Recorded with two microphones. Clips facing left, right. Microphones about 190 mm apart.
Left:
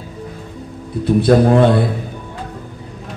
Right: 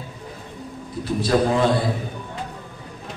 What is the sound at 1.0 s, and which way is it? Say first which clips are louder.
Speech: left 8 dB; 60° left (ahead or behind).